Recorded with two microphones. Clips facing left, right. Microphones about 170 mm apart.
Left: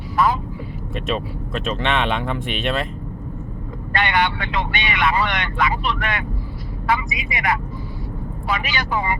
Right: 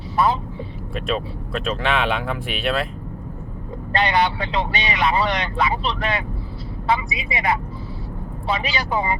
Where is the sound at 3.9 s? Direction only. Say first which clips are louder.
Right 1 dB; 30° right (ahead or behind).